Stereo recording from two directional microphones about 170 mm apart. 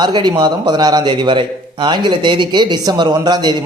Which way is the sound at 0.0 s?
25° right (ahead or behind).